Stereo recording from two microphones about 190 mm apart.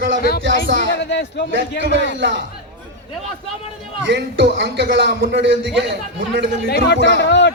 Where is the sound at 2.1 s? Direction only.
70° right (ahead or behind).